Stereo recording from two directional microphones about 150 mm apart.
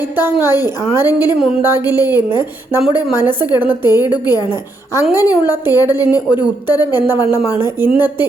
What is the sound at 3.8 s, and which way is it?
Speech, 25° left (ahead or behind).